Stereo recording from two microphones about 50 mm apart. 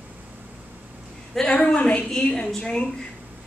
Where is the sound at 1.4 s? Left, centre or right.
Centre.